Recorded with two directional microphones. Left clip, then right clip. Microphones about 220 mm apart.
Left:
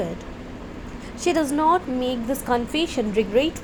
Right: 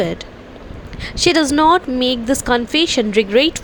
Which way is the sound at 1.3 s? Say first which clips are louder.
Right 6 dB; 70° right (ahead or behind).